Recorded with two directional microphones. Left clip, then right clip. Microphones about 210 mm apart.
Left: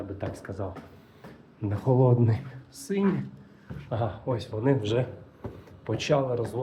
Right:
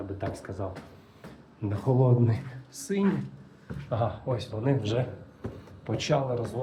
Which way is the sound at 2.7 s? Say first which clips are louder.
Left 1 dB; centre (ahead or behind).